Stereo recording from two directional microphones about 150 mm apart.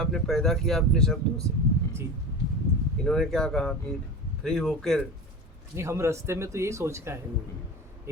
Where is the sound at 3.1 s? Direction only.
Centre (ahead or behind).